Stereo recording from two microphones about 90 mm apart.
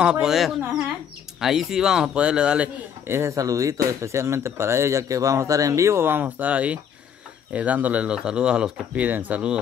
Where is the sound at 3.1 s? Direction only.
30° right (ahead or behind); by 9.0 s 10° right (ahead or behind).